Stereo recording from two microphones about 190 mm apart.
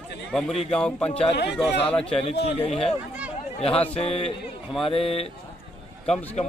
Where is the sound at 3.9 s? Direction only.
30° left (ahead or behind).